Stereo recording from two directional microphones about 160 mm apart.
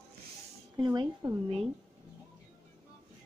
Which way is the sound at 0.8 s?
25° right (ahead or behind).